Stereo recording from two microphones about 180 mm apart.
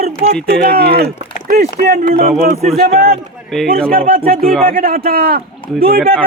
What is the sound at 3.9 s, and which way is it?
Speech, 55° right (ahead or behind).